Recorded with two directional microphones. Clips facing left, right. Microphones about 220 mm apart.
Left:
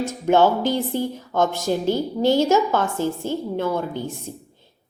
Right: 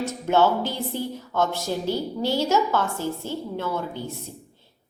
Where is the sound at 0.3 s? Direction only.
15° left (ahead or behind).